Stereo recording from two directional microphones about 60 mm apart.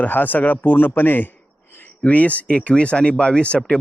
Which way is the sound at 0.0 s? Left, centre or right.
Left.